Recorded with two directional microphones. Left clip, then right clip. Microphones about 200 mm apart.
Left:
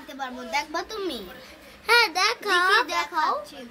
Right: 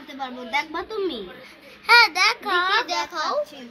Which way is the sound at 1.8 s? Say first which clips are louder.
Right 5 dB; 35° left (ahead or behind).